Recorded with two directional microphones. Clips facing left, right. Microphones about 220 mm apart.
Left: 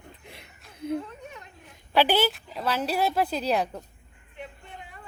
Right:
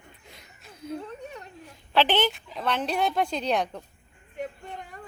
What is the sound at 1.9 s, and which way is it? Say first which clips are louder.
A woman's voice: left 1 dB; 10° left (ahead or behind).